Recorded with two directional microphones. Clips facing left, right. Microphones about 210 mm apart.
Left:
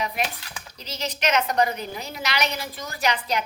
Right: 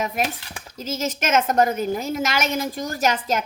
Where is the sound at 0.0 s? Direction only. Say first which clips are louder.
Right 3 dB; 45° right (ahead or behind).